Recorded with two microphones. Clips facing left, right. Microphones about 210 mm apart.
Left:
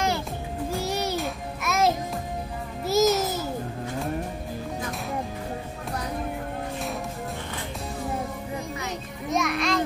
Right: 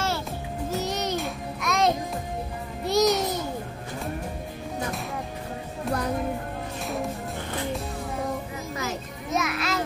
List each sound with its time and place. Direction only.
0.7 s music: 10° left (ahead or behind)
6.8 s music: centre (ahead or behind)
8.8 s children playing: 5° right (ahead or behind)